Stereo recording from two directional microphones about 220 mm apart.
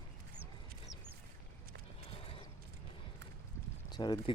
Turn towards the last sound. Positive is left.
turn(degrees=20)  # may be behind; listen again after turning